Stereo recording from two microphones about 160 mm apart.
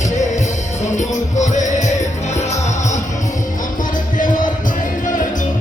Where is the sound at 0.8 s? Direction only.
50° left (ahead or behind).